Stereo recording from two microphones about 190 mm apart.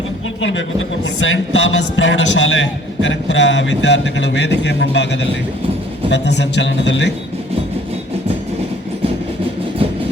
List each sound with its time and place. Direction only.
0.4 s speech: 85° left; by 7.1 s 70° left (ahead or behind)